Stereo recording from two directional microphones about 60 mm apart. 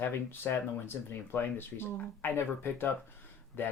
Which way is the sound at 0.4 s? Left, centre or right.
Left.